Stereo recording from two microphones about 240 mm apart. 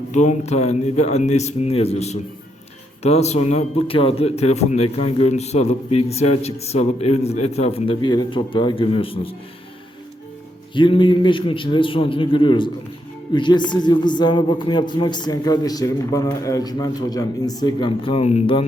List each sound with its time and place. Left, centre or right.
0.1 s speech: left
10.8 s a man's voice: left